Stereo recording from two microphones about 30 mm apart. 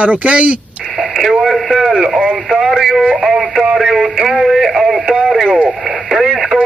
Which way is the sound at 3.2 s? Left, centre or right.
Centre.